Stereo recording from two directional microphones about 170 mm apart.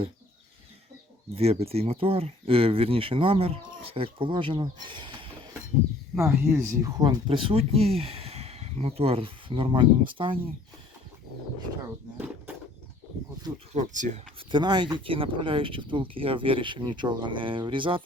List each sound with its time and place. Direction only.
1.4 s speech: 35° right (ahead or behind)
6.1 s speech: 15° right (ahead or behind); by 10.3 s 30° right (ahead or behind)
13.7 s speech: 45° right (ahead or behind)
14.3 s speech: 30° right (ahead or behind)